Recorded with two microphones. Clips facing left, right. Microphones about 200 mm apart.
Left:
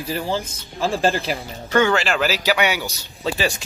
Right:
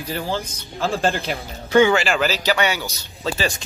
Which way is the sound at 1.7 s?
10° right (ahead or behind).